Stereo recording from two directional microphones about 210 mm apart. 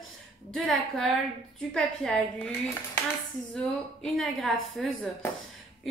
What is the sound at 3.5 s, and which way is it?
A woman's voice, 5° left (ahead or behind).